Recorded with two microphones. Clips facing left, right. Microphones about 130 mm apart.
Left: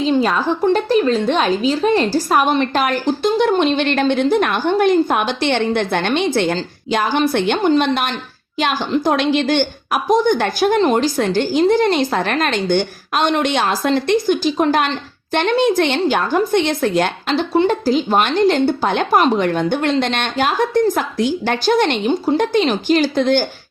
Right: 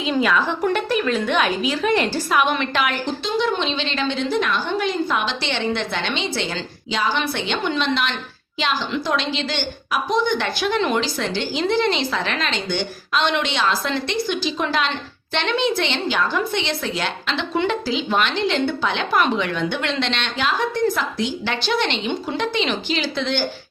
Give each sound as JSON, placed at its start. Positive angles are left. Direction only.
{"t": 0.0, "sound": "a woman's voice", "side_deg": 35}